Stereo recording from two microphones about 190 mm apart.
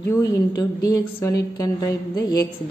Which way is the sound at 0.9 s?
20° left (ahead or behind).